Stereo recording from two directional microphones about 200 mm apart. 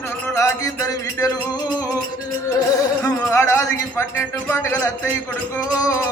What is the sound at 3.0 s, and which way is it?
A man's voice, 15° left (ahead or behind).